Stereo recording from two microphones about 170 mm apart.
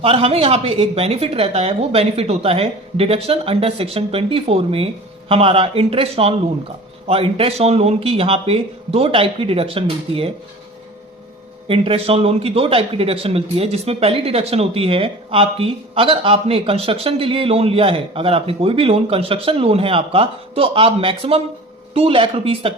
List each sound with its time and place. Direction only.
0.0 s a man's voice: 35° right (ahead or behind)
11.7 s a man's voice: 35° right (ahead or behind)